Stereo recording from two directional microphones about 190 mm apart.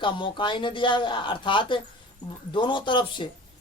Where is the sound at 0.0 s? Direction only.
25° left (ahead or behind).